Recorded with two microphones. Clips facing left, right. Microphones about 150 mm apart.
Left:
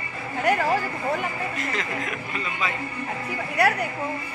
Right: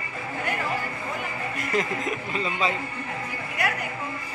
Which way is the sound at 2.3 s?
30° right (ahead or behind).